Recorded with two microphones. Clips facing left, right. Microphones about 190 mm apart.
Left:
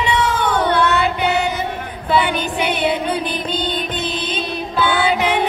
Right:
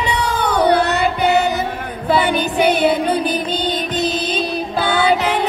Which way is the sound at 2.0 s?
40° right (ahead or behind).